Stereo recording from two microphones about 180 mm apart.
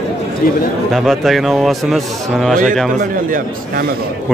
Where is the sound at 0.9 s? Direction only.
Centre (ahead or behind).